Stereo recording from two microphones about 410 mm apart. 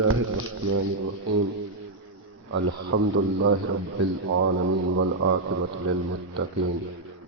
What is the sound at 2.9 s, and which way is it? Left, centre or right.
Speech, right.